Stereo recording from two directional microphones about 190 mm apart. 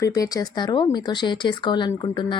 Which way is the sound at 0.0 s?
20° left (ahead or behind).